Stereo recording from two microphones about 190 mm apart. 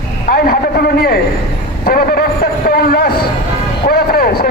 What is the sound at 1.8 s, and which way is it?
A man's voice, 50° left (ahead or behind).